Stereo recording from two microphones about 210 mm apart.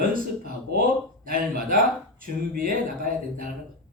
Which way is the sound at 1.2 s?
45° right (ahead or behind).